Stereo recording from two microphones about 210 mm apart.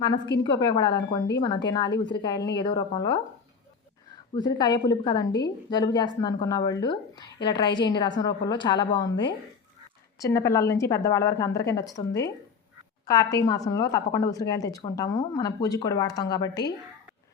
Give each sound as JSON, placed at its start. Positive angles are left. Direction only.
{"t": 0.3, "sound": "a woman's voice", "side_deg": 55}
{"t": 0.7, "sound": "a woman's voice", "side_deg": 20}
{"t": 1.9, "sound": "a woman's voice", "side_deg": 60}
{"t": 2.2, "sound": "a woman's voice", "side_deg": 20}
{"t": 4.4, "sound": "a woman's voice", "side_deg": 20}
{"t": 13.1, "sound": "a woman's voice", "side_deg": 15}